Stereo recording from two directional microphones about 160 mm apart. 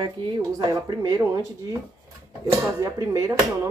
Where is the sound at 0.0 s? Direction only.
30° right (ahead or behind).